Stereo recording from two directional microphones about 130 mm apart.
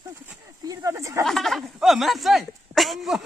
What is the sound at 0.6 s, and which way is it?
Speech, 25° right (ahead or behind).